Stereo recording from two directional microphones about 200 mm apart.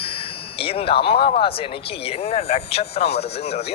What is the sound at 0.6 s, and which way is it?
Speech, 30° left (ahead or behind).